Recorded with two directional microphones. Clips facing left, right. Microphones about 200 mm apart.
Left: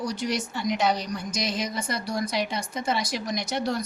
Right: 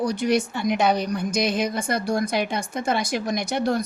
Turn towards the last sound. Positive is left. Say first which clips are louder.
# right 4 dB
turn(degrees=-50)  # may be behind; listen again after turning